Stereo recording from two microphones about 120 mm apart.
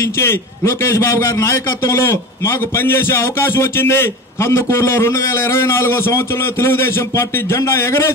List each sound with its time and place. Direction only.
0.2 s a man's voice: 20° left (ahead or behind)